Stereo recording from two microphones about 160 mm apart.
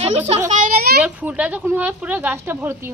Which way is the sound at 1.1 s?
10° right (ahead or behind).